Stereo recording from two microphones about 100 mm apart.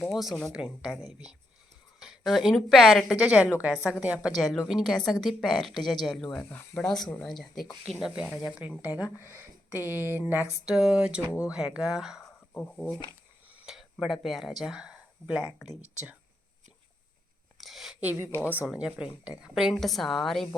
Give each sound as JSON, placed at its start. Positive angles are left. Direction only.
{"t": 0.0, "sound": "speech", "side_deg": 0}
{"t": 2.0, "sound": "a woman's voice", "side_deg": 0}
{"t": 3.3, "sound": "speech", "side_deg": -15}
{"t": 4.4, "sound": "speech", "side_deg": 0}
{"t": 6.5, "sound": "speech", "side_deg": 20}
{"t": 6.8, "sound": "speech", "side_deg": 5}
{"t": 8.4, "sound": "speech", "side_deg": -15}
{"t": 9.2, "sound": "speech", "side_deg": -25}
{"t": 10.7, "sound": "speech", "side_deg": -5}
{"t": 12.5, "sound": "speech", "side_deg": 10}
{"t": 13.5, "sound": "a sound", "side_deg": -15}
{"t": 14.0, "sound": "speech", "side_deg": 0}
{"t": 17.6, "sound": "a sound", "side_deg": 0}
{"t": 18.0, "sound": "speech", "side_deg": -20}